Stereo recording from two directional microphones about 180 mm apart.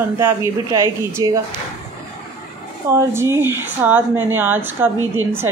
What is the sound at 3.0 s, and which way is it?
Speech, 15° right (ahead or behind).